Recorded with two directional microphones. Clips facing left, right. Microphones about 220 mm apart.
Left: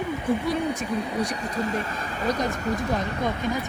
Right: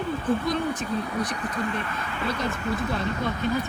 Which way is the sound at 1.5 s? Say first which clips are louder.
Left 3 dB; 40° left (ahead or behind).